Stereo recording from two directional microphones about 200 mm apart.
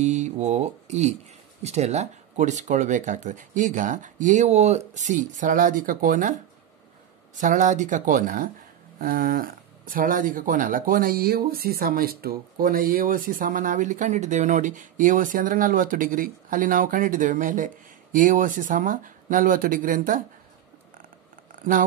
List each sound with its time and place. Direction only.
0.0 s speech: 35° right (ahead or behind)